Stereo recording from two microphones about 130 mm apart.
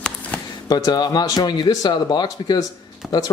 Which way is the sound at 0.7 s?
30° left (ahead or behind).